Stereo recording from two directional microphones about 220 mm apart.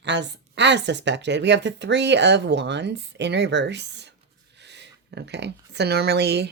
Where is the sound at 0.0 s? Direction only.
50° right (ahead or behind).